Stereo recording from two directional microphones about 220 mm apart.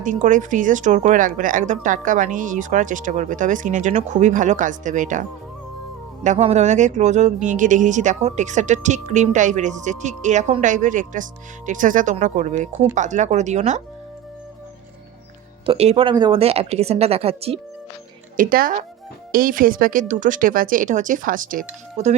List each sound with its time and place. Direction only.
0.0 s a woman's voice: 35° right (ahead or behind)
6.2 s a woman's voice: 30° right (ahead or behind)
15.6 s speech: 25° right (ahead or behind)
18.3 s a woman's voice: 40° right (ahead or behind)